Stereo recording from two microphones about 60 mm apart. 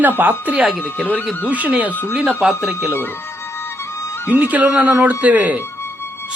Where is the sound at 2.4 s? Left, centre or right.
Centre.